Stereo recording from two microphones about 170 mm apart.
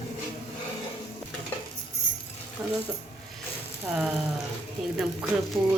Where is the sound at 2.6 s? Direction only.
10° right (ahead or behind).